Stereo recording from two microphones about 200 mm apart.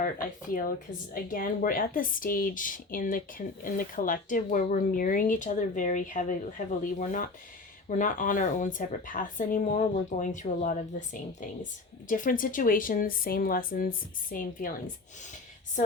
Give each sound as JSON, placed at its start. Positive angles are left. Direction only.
{"t": 0.0, "sound": "speech", "side_deg": 45}